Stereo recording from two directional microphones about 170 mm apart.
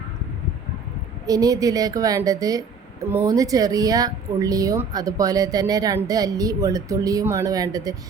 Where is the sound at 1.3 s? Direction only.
20° right (ahead or behind).